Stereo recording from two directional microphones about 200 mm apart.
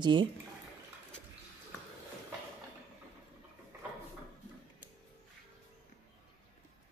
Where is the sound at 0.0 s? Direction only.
25° right (ahead or behind).